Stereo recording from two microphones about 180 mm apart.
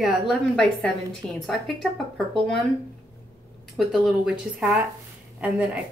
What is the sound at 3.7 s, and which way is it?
A woman's voice, centre (ahead or behind).